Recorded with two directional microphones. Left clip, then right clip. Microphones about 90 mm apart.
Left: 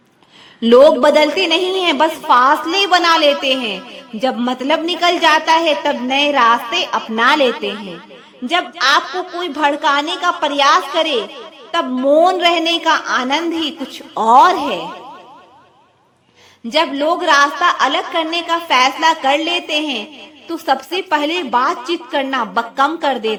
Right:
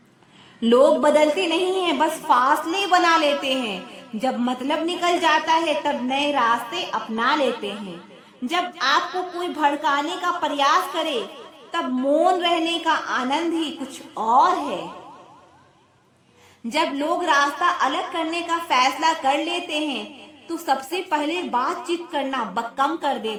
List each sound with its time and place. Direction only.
0.6 s a woman's voice: 35° left (ahead or behind)
3.0 s a woman's voice: 15° left (ahead or behind); by 7.9 s 35° left (ahead or behind)
8.4 s a woman's voice: 20° left (ahead or behind)
14.1 s a woman's voice: 55° left (ahead or behind)
16.6 s a woman's voice: 20° left (ahead or behind); by 23.4 s 35° left (ahead or behind)